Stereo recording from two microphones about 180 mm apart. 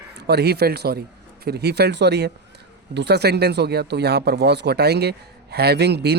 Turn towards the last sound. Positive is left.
turn(degrees=-65)  # may be behind; listen again after turning